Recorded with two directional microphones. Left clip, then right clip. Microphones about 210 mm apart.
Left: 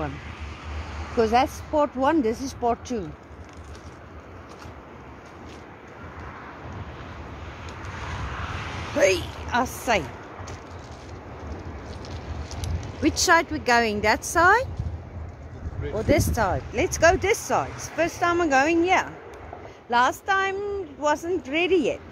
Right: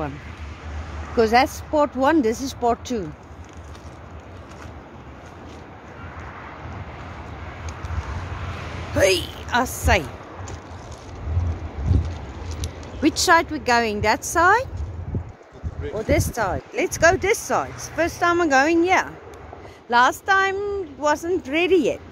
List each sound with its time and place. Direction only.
1.1 s speech: 15° right (ahead or behind)
8.9 s a woman's voice: 10° right (ahead or behind)
9.8 s a sound: 10° right (ahead or behind)
13.0 s speech: 10° right (ahead or behind)
15.9 s speech: centre (ahead or behind); by 22.0 s 20° right (ahead or behind)